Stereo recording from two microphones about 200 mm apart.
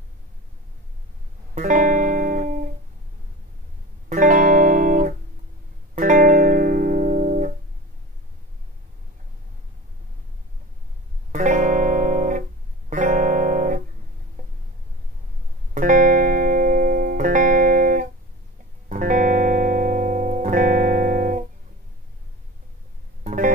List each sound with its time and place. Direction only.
1.5 s music: 40° right (ahead or behind)
4.1 s music: 40° right (ahead or behind)
11.3 s music: 40° right (ahead or behind)
15.7 s music: 40° right (ahead or behind)
23.2 s music: 40° right (ahead or behind)